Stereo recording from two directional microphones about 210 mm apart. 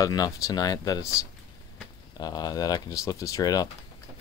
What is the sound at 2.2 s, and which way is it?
Speech, 20° left (ahead or behind).